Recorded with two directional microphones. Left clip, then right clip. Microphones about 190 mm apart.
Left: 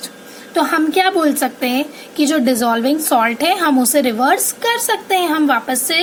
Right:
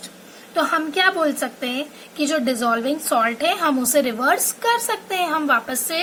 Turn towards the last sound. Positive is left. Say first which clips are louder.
# left 4 dB
turn(degrees=30)  # may be behind; listen again after turning